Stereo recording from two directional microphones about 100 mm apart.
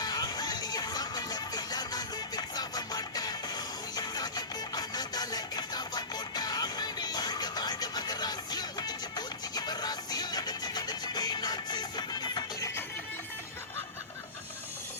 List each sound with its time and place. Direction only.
0.0 s music: 40° left (ahead or behind)